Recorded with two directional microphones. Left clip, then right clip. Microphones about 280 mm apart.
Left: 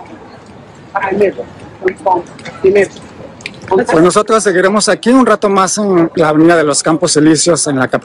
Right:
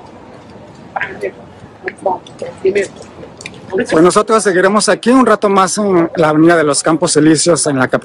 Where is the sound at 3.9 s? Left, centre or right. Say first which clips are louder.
Right 1 dB; centre.